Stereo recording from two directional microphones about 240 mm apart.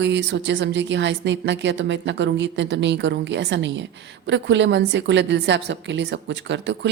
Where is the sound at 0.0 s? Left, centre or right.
Right.